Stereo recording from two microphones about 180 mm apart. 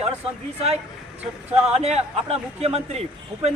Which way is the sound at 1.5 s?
35° right (ahead or behind).